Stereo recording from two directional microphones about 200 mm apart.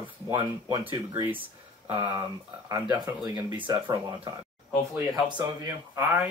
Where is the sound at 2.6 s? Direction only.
20° right (ahead or behind).